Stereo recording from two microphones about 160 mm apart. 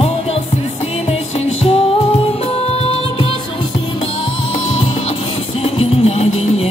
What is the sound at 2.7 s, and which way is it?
Music, 35° left (ahead or behind).